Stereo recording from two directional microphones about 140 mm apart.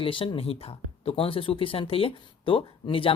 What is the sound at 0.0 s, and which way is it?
Speech, 40° left (ahead or behind).